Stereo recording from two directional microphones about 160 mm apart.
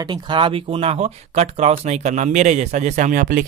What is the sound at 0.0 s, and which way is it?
Speech, 30° right (ahead or behind).